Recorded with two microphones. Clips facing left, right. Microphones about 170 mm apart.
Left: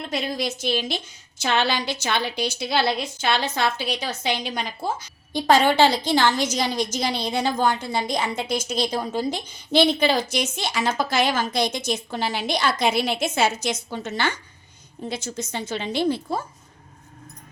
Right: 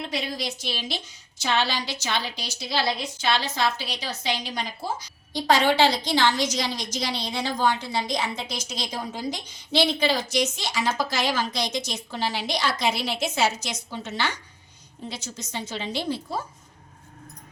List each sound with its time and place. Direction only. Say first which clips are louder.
0.1 s a woman's voice: left 4 dB; 50° left (ahead or behind)